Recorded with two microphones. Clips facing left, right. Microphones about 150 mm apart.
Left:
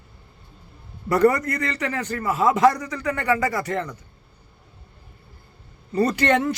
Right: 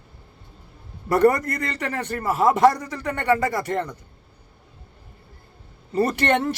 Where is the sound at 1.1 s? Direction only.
30° right (ahead or behind).